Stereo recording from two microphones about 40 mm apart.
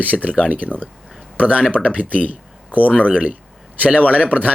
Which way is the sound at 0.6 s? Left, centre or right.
Left.